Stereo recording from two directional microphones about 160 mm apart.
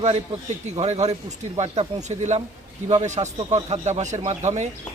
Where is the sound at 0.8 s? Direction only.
45° right (ahead or behind).